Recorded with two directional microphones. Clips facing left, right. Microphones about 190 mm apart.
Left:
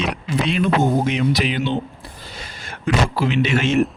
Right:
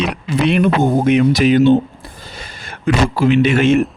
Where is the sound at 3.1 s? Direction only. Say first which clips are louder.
Right 6 dB; 50° right (ahead or behind).